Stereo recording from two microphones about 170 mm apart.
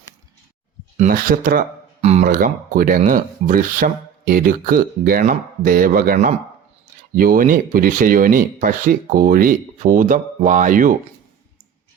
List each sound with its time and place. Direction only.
0.9 s speech: 50° right (ahead or behind)
2.0 s a sound: 40° right (ahead or behind)
2.2 s speech: 55° right (ahead or behind)